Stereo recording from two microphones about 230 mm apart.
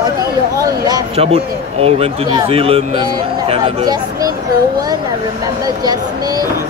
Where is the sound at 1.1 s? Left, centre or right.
Right.